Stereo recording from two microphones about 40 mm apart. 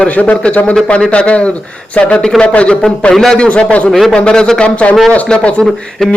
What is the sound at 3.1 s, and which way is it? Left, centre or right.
Speech, centre.